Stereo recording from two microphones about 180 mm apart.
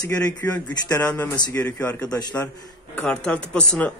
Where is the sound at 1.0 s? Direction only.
10° left (ahead or behind).